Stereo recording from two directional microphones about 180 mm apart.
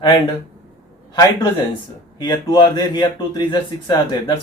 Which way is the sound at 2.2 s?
25° left (ahead or behind).